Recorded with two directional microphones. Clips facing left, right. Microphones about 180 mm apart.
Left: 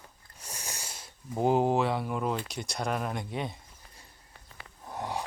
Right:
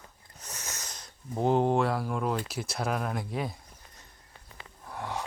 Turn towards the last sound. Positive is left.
turn(degrees=15)  # may be behind; listen again after turning